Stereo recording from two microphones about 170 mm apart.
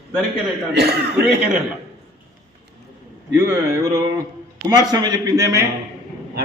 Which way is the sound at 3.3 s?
20° right (ahead or behind).